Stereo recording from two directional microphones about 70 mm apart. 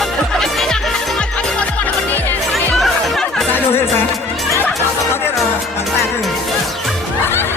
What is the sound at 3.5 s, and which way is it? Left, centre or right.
Music, left.